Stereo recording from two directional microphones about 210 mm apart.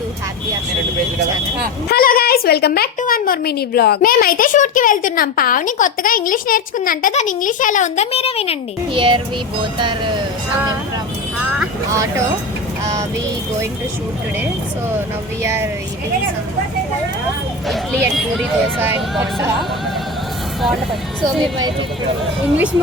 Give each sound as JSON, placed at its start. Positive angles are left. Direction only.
{"t": 1.9, "sound": "a woman's voice", "side_deg": 45}
{"t": 8.9, "sound": "speech", "side_deg": -25}
{"t": 11.9, "sound": "speech", "side_deg": -15}
{"t": 15.4, "sound": "speech", "side_deg": -10}
{"t": 17.7, "sound": "speech", "side_deg": -5}